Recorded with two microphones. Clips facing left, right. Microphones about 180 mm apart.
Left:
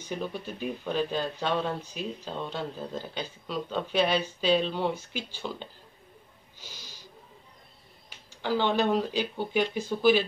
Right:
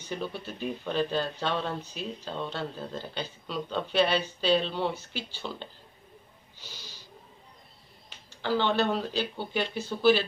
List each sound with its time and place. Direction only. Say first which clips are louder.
0.0 s speech: left 1 dB; 10° left (ahead or behind)
8.4 s speech: even; 10° left (ahead or behind)